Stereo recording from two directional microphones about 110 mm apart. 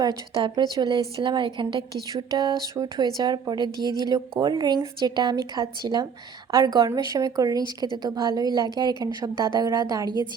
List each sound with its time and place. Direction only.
0.0 s speech: 40° right (ahead or behind)